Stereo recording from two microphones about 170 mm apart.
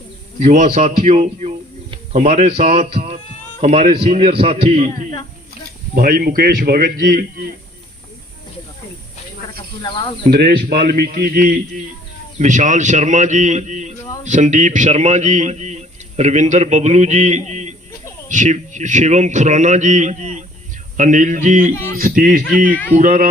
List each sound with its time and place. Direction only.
0.3 s a man's voice: 40° right (ahead or behind)
5.9 s a man's voice: 60° right (ahead or behind)
9.8 s speech: 30° left (ahead or behind)
10.2 s a man's voice: 70° right (ahead or behind)
12.4 s a man's voice: 45° right (ahead or behind)